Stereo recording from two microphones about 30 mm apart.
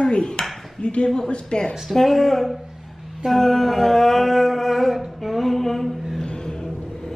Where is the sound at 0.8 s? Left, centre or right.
Left.